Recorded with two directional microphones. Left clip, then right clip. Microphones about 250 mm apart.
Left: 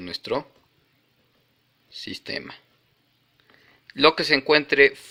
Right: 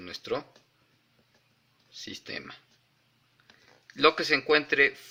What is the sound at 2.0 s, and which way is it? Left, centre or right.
Speech, left.